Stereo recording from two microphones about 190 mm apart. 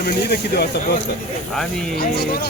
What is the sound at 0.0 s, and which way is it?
Speech, 60° left (ahead or behind).